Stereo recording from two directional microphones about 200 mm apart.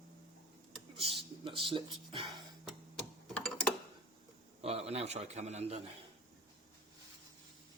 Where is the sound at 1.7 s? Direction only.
25° right (ahead or behind).